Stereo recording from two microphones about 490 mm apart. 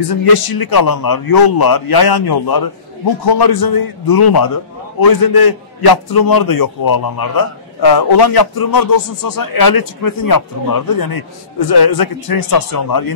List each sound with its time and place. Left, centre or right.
0.1 s a man's voice: left